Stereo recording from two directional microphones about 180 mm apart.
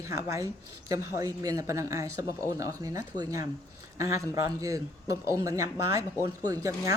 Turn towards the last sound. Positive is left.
turn(degrees=-15)  # may be behind; listen again after turning